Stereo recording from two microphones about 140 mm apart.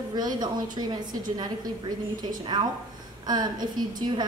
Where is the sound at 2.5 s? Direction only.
30° right (ahead or behind).